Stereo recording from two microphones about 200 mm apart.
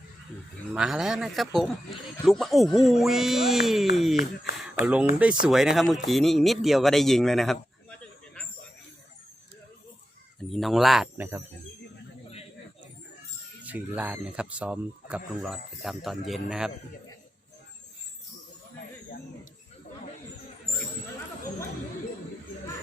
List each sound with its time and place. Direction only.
0.7 s speech: centre (ahead or behind)
4.5 s a sound: centre (ahead or behind)
4.8 s speech: 5° right (ahead or behind)
10.5 s speech: centre (ahead or behind)
13.6 s speech: 10° right (ahead or behind)